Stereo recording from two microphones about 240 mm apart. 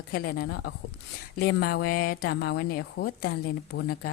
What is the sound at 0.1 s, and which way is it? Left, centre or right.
A woman's voice, left.